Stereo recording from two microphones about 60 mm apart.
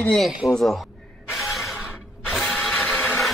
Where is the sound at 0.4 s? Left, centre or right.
Left.